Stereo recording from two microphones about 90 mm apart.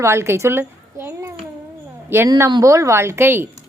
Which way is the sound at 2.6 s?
35° right (ahead or behind).